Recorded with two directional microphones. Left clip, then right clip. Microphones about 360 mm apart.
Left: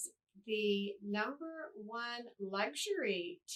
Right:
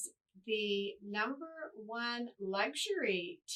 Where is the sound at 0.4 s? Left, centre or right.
Centre.